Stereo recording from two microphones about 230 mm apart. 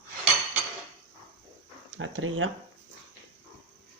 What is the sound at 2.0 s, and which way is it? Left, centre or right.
Speech, right.